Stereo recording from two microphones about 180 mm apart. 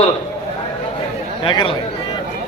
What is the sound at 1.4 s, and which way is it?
Speech, 30° left (ahead or behind).